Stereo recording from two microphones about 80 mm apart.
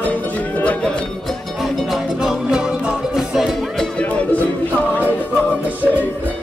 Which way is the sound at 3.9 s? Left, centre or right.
Centre.